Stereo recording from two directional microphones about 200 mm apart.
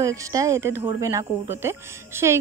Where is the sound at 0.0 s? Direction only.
15° right (ahead or behind).